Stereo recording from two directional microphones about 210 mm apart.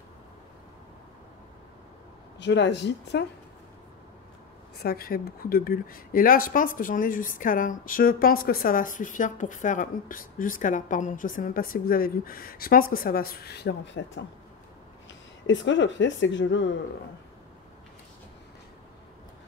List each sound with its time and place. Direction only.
2.3 s a woman's voice: 55° left (ahead or behind)
4.7 s a woman's voice: 45° left (ahead or behind)
15.4 s a woman's voice: 60° left (ahead or behind)